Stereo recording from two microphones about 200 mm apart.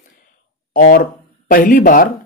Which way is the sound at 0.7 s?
45° left (ahead or behind).